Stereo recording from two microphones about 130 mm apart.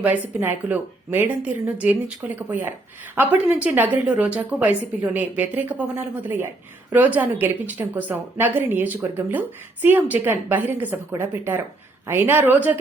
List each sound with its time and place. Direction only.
0.0 s a woman's voice: 15° right (ahead or behind)